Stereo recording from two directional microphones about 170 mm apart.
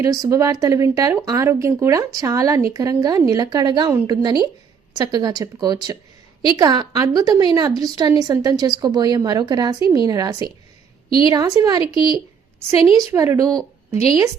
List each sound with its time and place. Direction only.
0.0 s a woman's voice: 20° right (ahead or behind)
11.9 s a woman's voice: 30° left (ahead or behind)
12.5 s a woman's voice: 20° right (ahead or behind)